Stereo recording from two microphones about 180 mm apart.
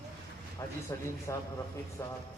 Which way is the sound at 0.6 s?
20° left (ahead or behind).